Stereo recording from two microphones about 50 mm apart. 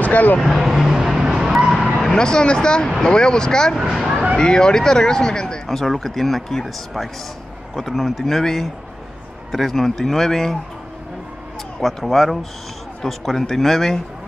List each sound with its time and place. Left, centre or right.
0.0 s speech: left
0.4 s vehicle: centre
2.0 s speech: centre
3.9 s speech: centre
4.4 s speech: centre
5.7 s speech: centre
11.8 s speech: centre